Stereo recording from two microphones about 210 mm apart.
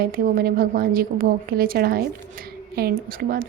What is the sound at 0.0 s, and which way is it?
A woman's voice, 45° right (ahead or behind).